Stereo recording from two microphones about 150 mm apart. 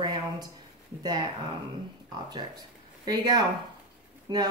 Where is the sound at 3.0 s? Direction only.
30° right (ahead or behind).